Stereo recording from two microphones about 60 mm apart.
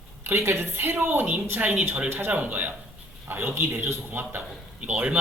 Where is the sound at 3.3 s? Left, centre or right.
Right.